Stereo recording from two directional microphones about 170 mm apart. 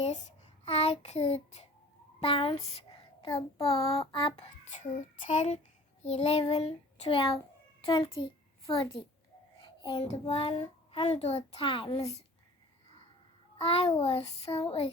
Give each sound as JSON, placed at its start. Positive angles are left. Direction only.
{"t": 0.0, "sound": "child singing", "side_deg": 40}
{"t": 2.2, "sound": "a child's voice", "side_deg": 30}
{"t": 9.6, "sound": "child singing", "side_deg": 30}
{"t": 13.6, "sound": "a child's voice", "side_deg": 35}